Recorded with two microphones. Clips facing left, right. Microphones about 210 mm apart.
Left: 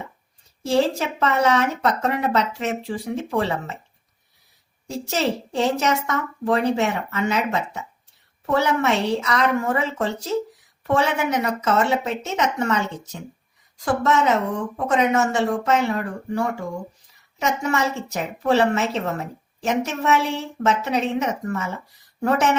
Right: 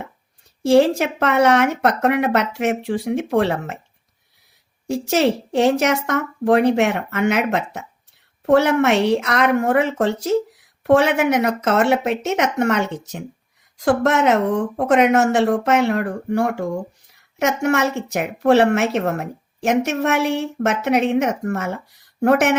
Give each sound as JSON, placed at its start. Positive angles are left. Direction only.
{"t": 0.7, "sound": "speech", "side_deg": -65}
{"t": 4.9, "sound": "a woman's voice", "side_deg": -70}